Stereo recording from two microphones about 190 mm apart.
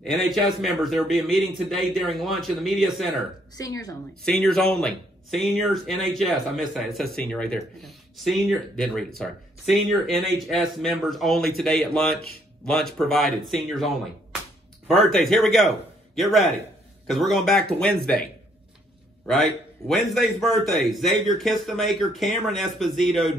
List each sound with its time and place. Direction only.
0.0 s speech: centre (ahead or behind)
3.5 s speech: 20° left (ahead or behind)
4.2 s speech: 5° left (ahead or behind)
17.1 s speech: centre (ahead or behind)